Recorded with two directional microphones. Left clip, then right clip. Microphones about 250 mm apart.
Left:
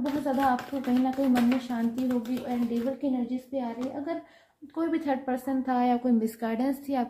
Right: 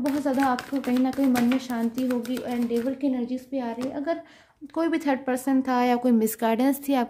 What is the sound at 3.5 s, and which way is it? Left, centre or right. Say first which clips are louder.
A woman's voice: right 3 dB; right.